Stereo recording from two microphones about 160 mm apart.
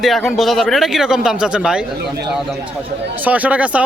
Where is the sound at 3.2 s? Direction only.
10° right (ahead or behind).